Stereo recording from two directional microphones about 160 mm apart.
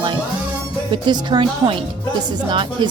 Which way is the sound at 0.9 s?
25° right (ahead or behind).